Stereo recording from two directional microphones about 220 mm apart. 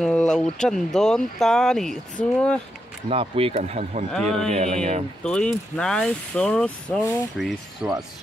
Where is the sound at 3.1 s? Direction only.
25° right (ahead or behind).